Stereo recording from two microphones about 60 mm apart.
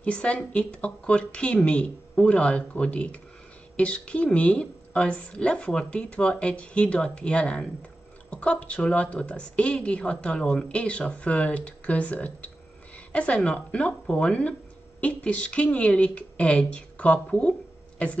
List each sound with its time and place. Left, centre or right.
0.0 s a woman's voice: left